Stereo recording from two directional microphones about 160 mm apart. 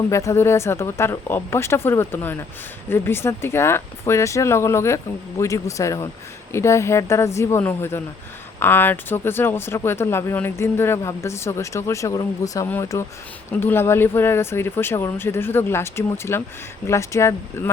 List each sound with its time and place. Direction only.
0.1 s a man's voice: 20° left (ahead or behind)